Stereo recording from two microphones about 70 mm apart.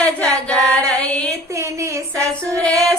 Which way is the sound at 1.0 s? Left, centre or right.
Centre.